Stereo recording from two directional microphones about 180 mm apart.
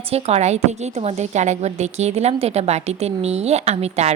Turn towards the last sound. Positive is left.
turn(degrees=-40)  # may be behind; listen again after turning